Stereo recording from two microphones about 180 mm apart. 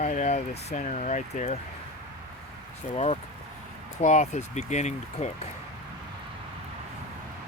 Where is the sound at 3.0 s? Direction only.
35° left (ahead or behind).